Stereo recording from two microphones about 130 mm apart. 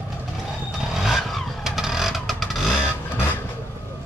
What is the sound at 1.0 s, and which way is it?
Vehicle, centre (ahead or behind).